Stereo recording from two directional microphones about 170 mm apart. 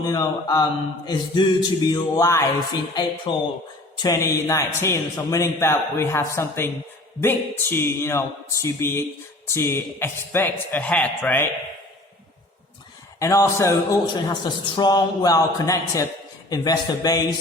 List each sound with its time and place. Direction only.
0.0 s speech: 20° left (ahead or behind)
3.3 s a man's voice: 30° left (ahead or behind); by 11.4 s 10° left (ahead or behind)
13.1 s speech: 20° left (ahead or behind)